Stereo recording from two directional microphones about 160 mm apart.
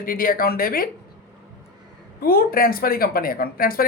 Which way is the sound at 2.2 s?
65° left (ahead or behind).